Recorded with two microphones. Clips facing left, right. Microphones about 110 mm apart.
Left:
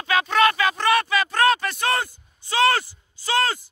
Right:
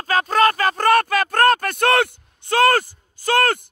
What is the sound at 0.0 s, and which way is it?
Speech, 40° right (ahead or behind).